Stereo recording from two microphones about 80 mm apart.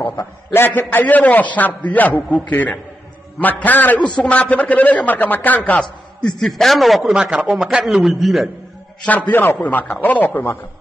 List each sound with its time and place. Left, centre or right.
0.5 s a man's voice: left; by 8.5 s centre
9.0 s a man's voice: centre